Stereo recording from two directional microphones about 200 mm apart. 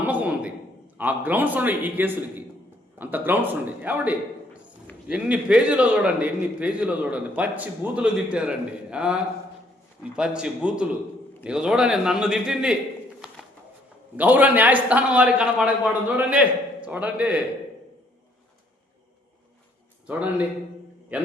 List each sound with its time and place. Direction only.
0.0 s a sound: 10° right (ahead or behind)
0.9 s a man's voice: 10° right (ahead or behind)
14.2 s a man's voice: 10° right (ahead or behind)
21.1 s a man's voice: 5° right (ahead or behind)